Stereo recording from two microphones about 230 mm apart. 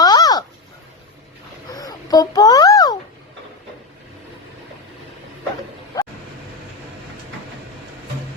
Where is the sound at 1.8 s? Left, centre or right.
Centre.